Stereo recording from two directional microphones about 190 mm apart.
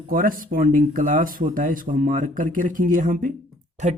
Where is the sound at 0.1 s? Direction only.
45° right (ahead or behind).